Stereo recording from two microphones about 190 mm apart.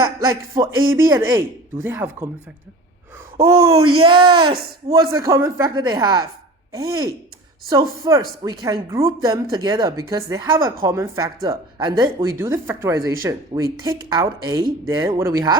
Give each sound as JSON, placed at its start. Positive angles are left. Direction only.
{"t": 0.2, "sound": "speech", "side_deg": -20}
{"t": 3.3, "sound": "speech", "side_deg": -20}